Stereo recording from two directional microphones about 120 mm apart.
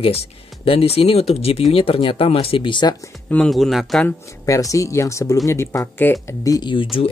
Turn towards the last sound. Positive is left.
turn(degrees=45)  # may be behind; listen again after turning